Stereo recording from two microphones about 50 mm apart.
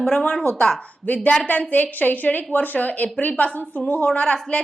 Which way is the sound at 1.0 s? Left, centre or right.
Left.